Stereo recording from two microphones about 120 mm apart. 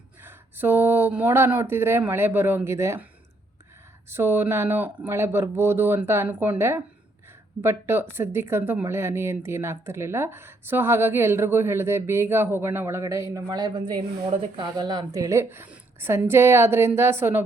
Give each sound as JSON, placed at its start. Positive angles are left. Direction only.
{"t": 0.2, "sound": "speech", "side_deg": -20}
{"t": 4.1, "sound": "a woman's voice", "side_deg": -20}